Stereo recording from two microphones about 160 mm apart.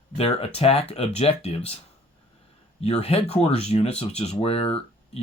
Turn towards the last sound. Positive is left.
turn(degrees=35)  # may be behind; listen again after turning